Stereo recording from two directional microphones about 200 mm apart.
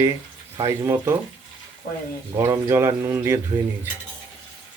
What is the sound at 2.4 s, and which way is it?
Speech, 15° right (ahead or behind).